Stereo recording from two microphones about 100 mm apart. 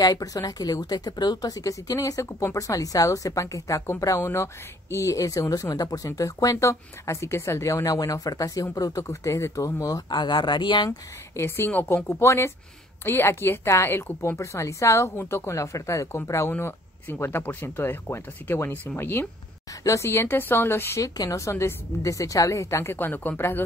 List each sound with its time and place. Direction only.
0.0 s a woman's voice: 40° left (ahead or behind)
11.3 s a woman's voice: 25° left (ahead or behind)
21.0 s a woman's voice: 35° left (ahead or behind)